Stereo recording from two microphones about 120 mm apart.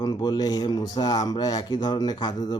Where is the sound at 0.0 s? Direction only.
35° left (ahead or behind).